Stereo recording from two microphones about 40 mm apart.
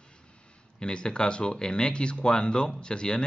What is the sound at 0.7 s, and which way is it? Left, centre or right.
A man's voice, left.